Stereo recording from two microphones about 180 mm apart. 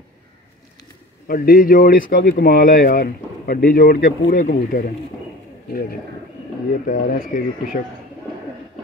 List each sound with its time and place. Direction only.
1.2 s speech: 55° left (ahead or behind)
6.9 s speech: 50° left (ahead or behind)